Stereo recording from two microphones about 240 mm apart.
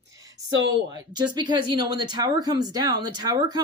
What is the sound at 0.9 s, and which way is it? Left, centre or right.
Speech, centre.